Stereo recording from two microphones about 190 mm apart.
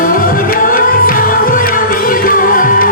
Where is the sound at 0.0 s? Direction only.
50° left (ahead or behind).